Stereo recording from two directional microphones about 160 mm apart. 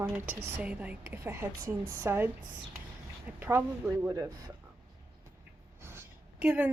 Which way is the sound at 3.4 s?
10° right (ahead or behind).